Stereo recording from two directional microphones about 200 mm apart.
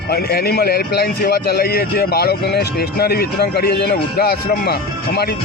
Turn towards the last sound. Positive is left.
turn(degrees=50)  # may be behind; listen again after turning